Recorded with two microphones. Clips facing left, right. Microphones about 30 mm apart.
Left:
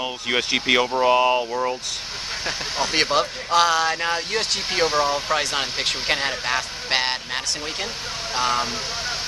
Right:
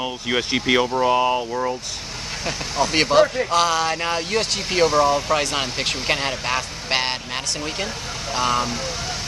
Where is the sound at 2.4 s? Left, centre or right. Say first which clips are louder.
Right 3 dB; centre.